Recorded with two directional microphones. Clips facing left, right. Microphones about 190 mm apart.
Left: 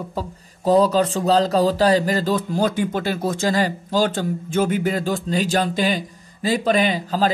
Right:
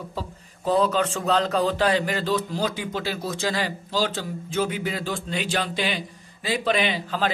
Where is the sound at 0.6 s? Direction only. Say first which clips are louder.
Left 5 dB; 40° left (ahead or behind).